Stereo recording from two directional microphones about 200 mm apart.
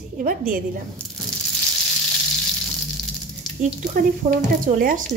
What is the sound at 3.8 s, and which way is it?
Speech, 45° right (ahead or behind).